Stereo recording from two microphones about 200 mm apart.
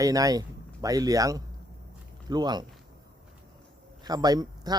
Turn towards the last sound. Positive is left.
turn(degrees=-20)  # may be behind; listen again after turning